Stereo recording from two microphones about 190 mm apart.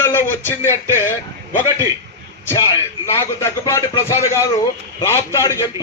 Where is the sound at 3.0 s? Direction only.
15° left (ahead or behind).